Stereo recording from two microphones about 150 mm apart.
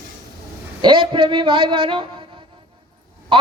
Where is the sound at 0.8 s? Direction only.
35° right (ahead or behind).